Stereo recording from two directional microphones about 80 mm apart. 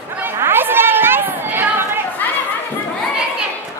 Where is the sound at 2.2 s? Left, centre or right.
Left.